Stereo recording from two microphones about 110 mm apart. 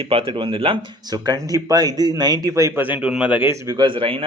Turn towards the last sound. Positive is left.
turn(degrees=-55)  # may be behind; listen again after turning